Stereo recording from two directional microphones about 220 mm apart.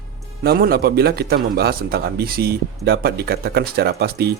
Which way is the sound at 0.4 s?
45° right (ahead or behind).